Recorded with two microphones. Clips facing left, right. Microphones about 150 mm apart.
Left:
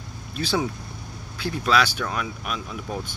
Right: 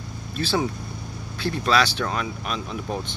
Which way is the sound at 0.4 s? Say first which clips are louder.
Right 1 dB; 10° left (ahead or behind).